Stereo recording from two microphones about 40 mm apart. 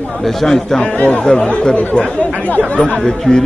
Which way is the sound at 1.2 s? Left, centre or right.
Centre.